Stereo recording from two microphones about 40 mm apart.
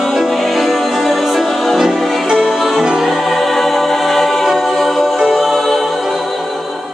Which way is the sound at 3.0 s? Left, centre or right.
Centre.